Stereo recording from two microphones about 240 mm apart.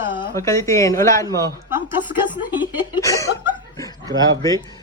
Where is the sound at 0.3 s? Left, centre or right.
Centre.